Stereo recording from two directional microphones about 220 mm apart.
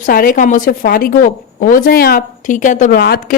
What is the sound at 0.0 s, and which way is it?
A woman's voice, 40° left (ahead or behind).